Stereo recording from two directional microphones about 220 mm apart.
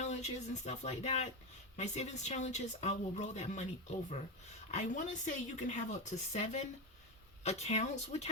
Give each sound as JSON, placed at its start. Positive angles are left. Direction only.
{"t": 0.0, "sound": "speech", "side_deg": 30}